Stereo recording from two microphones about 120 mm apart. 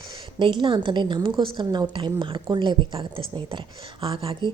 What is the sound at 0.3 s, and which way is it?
Speech, 40° right (ahead or behind).